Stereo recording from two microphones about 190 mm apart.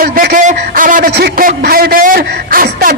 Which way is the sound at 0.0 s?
50° right (ahead or behind).